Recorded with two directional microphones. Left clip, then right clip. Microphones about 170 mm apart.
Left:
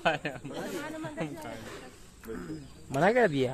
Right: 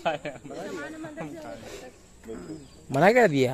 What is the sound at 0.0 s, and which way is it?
Speech, 90° left.